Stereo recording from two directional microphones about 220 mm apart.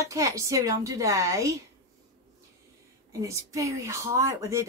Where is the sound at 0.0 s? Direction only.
15° right (ahead or behind).